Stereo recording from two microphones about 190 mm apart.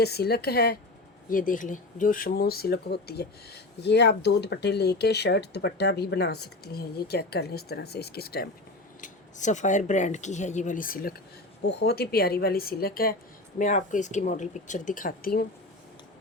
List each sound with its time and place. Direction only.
0.0 s speech: 55° left (ahead or behind)
1.3 s speech: 45° left (ahead or behind)
9.0 s speech: 40° left (ahead or behind)
11.6 s a woman's voice: 60° left (ahead or behind)